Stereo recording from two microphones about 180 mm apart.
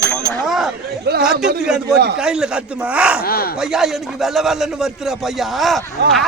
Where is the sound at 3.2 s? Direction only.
55° left (ahead or behind).